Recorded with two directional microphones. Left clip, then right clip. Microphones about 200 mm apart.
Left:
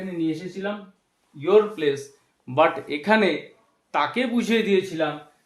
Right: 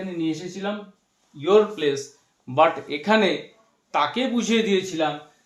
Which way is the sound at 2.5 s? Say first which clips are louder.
Right 1 dB; 25° left (ahead or behind).